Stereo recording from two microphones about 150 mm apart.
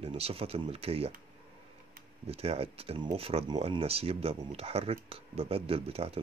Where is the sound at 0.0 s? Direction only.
40° right (ahead or behind).